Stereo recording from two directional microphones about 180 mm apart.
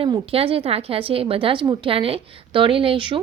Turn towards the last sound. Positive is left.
turn(degrees=-30)  # may be behind; listen again after turning